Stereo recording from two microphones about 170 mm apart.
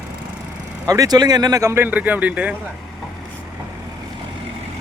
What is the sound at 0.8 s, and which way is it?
Speech, 20° right (ahead or behind).